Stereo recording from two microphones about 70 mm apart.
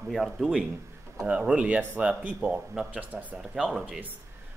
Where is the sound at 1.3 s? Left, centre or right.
Centre.